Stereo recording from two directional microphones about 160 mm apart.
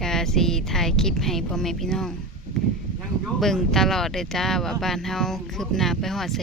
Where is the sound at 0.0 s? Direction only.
5° left (ahead or behind).